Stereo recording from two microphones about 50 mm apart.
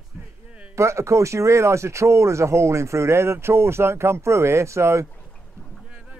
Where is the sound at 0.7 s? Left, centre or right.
Right.